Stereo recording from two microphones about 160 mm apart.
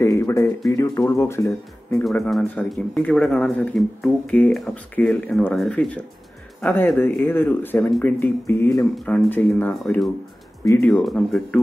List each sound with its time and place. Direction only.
0.0 s speech: 15° left (ahead or behind)
2.0 s speech: 5° left (ahead or behind); by 10.9 s 20° left (ahead or behind)
10.9 s speech: 10° left (ahead or behind)